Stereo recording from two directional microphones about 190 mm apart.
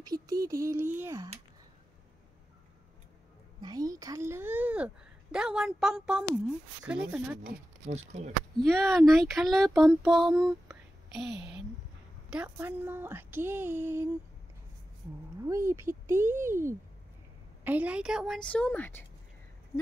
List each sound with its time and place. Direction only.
0.0 s a woman's voice: 20° right (ahead or behind)
3.6 s a woman's voice: 20° right (ahead or behind); by 6.2 s 5° right (ahead or behind)
6.8 s child singing: 5° right (ahead or behind)
7.8 s speech: 35° right (ahead or behind)
8.6 s child singing: centre (ahead or behind)
12.3 s a woman's voice: 10° right (ahead or behind)
15.4 s a woman's voice: 15° right (ahead or behind)
17.6 s child singing: 10° right (ahead or behind); by 19.0 s 10° left (ahead or behind)